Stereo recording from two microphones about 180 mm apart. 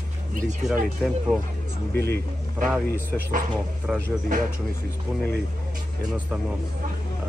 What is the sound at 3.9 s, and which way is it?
Speech, centre (ahead or behind).